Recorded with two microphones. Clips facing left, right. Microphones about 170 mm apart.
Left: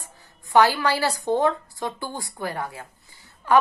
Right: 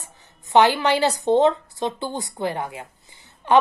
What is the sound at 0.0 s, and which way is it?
A woman's voice, 20° right (ahead or behind).